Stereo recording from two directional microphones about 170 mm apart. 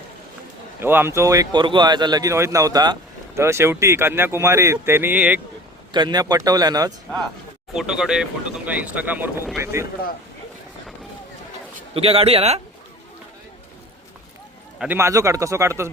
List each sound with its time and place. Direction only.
0.8 s speech: 15° right (ahead or behind)
5.9 s speech: 25° right (ahead or behind)
7.7 s speech: 5° right (ahead or behind)
11.9 s speech: 35° right (ahead or behind)
14.8 s speech: 10° right (ahead or behind)